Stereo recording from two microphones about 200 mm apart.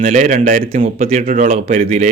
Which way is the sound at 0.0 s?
40° right (ahead or behind).